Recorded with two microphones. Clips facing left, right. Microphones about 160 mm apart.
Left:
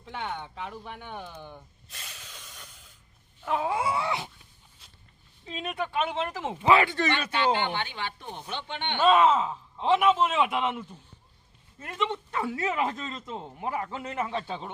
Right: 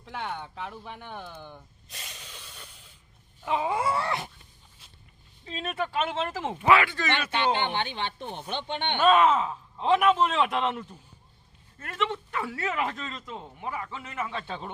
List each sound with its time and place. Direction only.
0.0 s speech: centre (ahead or behind)
2.1 s a sound: 10° right (ahead or behind)
3.4 s speech: centre (ahead or behind)
3.9 s speech: 10° left (ahead or behind)
4.8 s walk: 5° right (ahead or behind)
5.5 s speech: 15° left (ahead or behind)
7.1 s speech: 25° right (ahead or behind)
9.2 s a man's voice: 25° left (ahead or behind)
10.5 s speech: 5° left (ahead or behind)
11.9 s a man's voice: 25° left (ahead or behind)
13.6 s a man's voice: 35° left (ahead or behind)